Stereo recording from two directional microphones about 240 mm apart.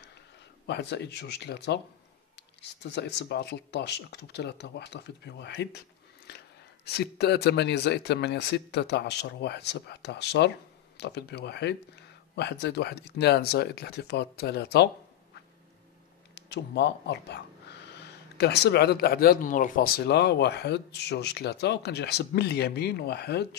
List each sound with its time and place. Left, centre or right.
0.7 s speech: left
16.3 s speech: left